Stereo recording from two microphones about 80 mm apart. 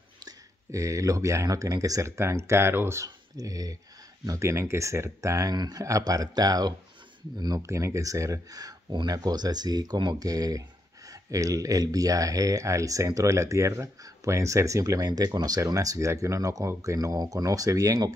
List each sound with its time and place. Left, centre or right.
0.2 s speech: right
3.3 s speech: right
4.3 s speech: right
7.7 s speech: right
10.2 s speech: right